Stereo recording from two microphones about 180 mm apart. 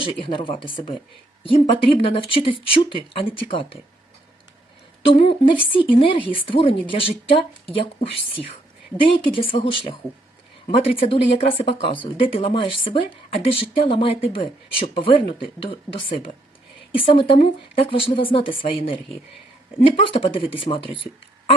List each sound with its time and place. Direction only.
0.0 s speech: 30° left (ahead or behind)
5.1 s speech: 30° left (ahead or behind)